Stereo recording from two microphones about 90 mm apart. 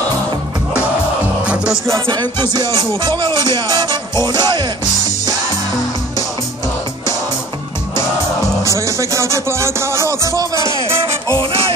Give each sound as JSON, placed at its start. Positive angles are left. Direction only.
{"t": 1.4, "sound": "music", "side_deg": -10}
{"t": 2.0, "sound": "music", "side_deg": -55}
{"t": 2.7, "sound": "music", "side_deg": 35}
{"t": 3.0, "sound": "music", "side_deg": -65}
{"t": 8.7, "sound": "music", "side_deg": -35}